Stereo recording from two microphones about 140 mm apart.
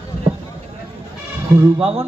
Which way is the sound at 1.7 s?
40° right (ahead or behind).